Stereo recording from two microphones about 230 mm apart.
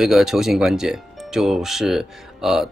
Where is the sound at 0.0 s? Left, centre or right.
Centre.